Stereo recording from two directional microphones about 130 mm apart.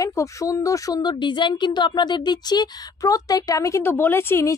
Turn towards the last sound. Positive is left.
turn(degrees=20)  # may be behind; listen again after turning